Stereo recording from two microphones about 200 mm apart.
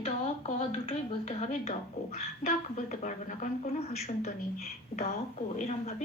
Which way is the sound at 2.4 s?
40° left (ahead or behind).